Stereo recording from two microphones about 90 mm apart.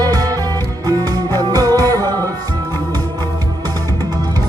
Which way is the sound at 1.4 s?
45° right (ahead or behind).